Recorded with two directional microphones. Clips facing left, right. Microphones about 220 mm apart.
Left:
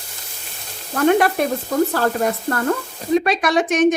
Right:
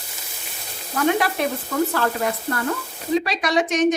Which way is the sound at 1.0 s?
50° left (ahead or behind).